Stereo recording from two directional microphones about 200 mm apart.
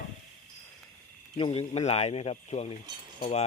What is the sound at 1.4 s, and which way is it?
A man's voice, 30° left (ahead or behind).